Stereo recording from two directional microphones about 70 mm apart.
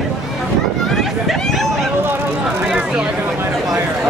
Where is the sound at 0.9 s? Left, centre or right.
Centre.